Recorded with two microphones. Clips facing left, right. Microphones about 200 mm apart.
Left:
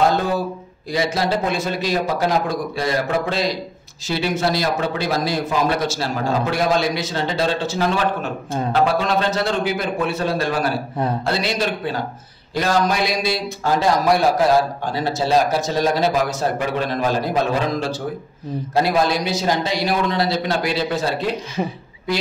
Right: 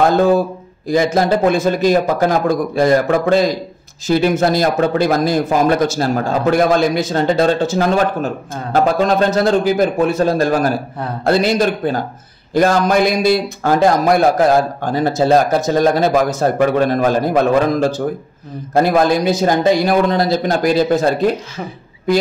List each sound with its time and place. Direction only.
0.8 s a man's voice: 50° right (ahead or behind)